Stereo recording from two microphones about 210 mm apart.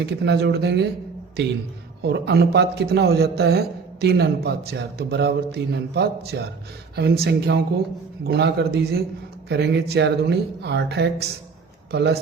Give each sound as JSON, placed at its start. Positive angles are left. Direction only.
{"t": 0.0, "sound": "a man's voice", "side_deg": -50}
{"t": 2.0, "sound": "a man's voice", "side_deg": -55}